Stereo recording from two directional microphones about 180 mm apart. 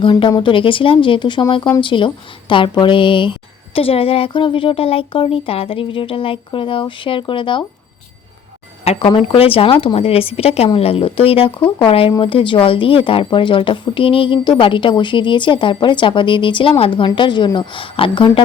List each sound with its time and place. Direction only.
0.0 s a woman's voice: 25° left (ahead or behind)
8.8 s a woman's voice: 35° left (ahead or behind)